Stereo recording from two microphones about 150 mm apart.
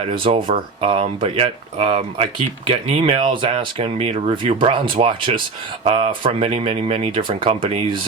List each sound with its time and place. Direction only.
0.0 s speech: 35° right (ahead or behind)